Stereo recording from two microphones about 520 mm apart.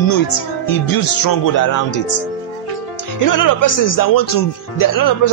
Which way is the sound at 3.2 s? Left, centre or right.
Left.